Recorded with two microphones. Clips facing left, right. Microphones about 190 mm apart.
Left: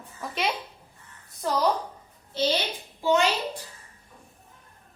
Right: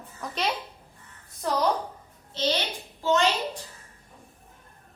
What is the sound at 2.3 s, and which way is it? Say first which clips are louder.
Speech: left 2 dB; 10° left (ahead or behind).